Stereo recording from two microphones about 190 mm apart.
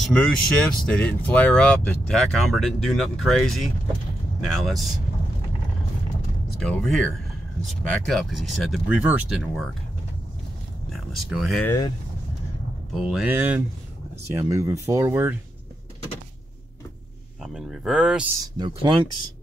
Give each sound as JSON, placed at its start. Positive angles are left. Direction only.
{"t": 0.0, "sound": "speech", "side_deg": 5}
{"t": 6.6, "sound": "speech", "side_deg": 5}
{"t": 10.9, "sound": "speech", "side_deg": 0}
{"t": 11.6, "sound": "speech", "side_deg": 15}
{"t": 12.9, "sound": "speech", "side_deg": -5}
{"t": 17.4, "sound": "speech", "side_deg": 0}
{"t": 18.6, "sound": "speech", "side_deg": -25}